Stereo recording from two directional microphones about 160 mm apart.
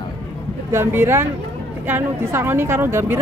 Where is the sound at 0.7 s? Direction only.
15° right (ahead or behind).